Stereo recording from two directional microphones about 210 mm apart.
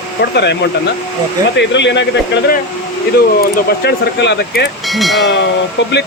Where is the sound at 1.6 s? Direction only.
55° left (ahead or behind).